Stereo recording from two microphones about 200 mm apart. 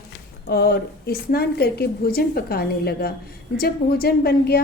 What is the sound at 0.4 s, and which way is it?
A woman's voice, 50° left (ahead or behind).